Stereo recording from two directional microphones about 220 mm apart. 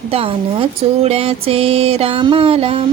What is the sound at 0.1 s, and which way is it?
Speech, 25° right (ahead or behind).